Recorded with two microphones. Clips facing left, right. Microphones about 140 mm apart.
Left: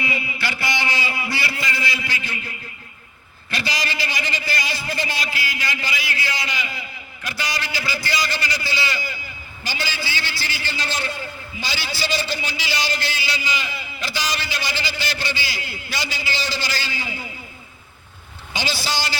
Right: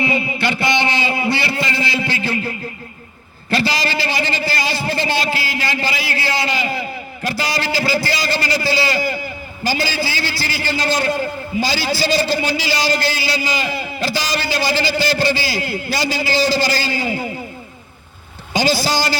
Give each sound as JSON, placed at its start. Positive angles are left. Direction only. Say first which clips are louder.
{"t": 0.0, "sound": "a sound", "louder": "right 8 dB", "side_deg": -30}
{"t": 9.6, "sound": "a man's voice", "louder": "right 9 dB", "side_deg": -40}
{"t": 18.5, "sound": "a man's voice", "louder": "right 9 dB", "side_deg": -40}